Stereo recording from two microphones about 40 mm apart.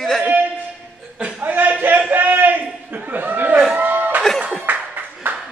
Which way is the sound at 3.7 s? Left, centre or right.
Right.